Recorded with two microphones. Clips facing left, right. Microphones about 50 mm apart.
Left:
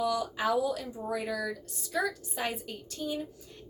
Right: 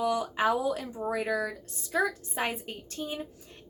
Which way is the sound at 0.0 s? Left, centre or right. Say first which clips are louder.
Right 2 dB; right.